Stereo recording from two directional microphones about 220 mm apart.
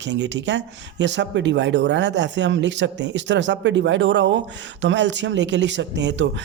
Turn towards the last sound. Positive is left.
turn(degrees=-55)  # may be behind; listen again after turning